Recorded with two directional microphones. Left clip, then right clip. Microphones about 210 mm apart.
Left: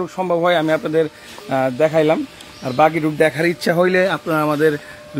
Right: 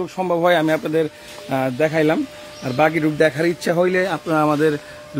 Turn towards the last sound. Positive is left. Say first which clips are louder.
# left 1 dB
turn(degrees=-10)  # may be behind; listen again after turning